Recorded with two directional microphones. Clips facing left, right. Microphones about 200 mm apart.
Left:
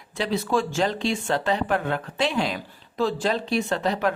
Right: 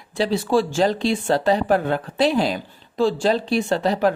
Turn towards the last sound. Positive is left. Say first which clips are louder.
# right 5 dB
turn(degrees=-35)  # may be behind; listen again after turning